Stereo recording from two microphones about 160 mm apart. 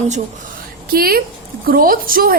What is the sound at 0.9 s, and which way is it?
A woman's voice, 70° right (ahead or behind).